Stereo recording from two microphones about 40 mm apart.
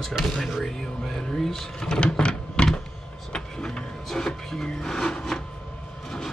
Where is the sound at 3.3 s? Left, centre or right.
Centre.